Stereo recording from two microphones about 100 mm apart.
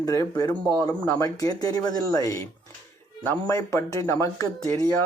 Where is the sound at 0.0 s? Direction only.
30° left (ahead or behind).